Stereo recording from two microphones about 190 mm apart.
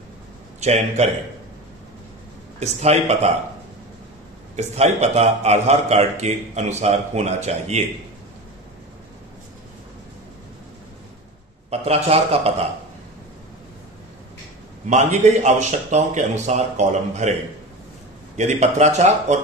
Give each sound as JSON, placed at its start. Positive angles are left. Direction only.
{"t": 0.6, "sound": "a man's voice", "side_deg": -35}
{"t": 2.6, "sound": "a man's voice", "side_deg": -35}
{"t": 4.6, "sound": "a man's voice", "side_deg": -35}
{"t": 11.7, "sound": "a man's voice", "side_deg": -35}
{"t": 14.9, "sound": "a man's voice", "side_deg": -40}
{"t": 18.3, "sound": "a man's voice", "side_deg": -35}